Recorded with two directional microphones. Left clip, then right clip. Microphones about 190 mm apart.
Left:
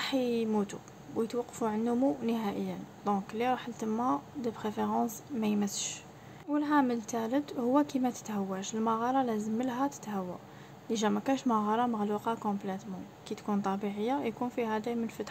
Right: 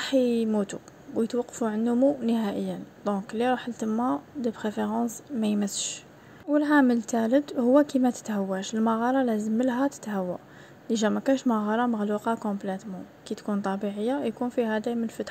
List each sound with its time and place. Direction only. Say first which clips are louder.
0.0 s speech: right 7 dB; 20° right (ahead or behind)